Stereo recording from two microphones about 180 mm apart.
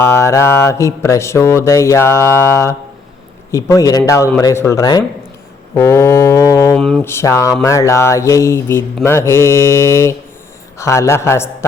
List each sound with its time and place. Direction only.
0.0 s speech: 15° left (ahead or behind)
6.7 s speech: 5° left (ahead or behind)
7.1 s speech: 15° left (ahead or behind)